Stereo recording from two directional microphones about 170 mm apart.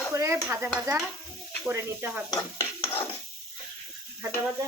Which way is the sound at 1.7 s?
15° right (ahead or behind).